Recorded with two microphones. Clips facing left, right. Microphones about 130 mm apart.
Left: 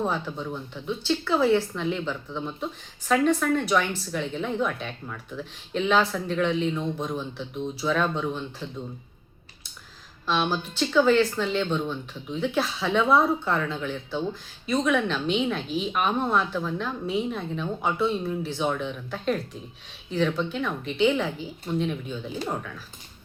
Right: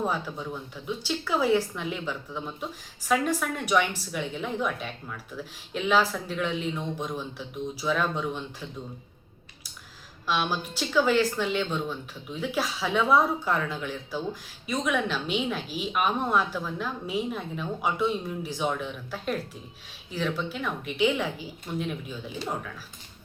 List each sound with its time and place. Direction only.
0.0 s speech: 5° right (ahead or behind)
10.2 s a woman's voice: 5° right (ahead or behind)